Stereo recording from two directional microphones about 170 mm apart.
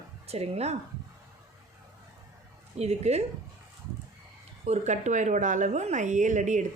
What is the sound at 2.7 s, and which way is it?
Speech, 40° right (ahead or behind).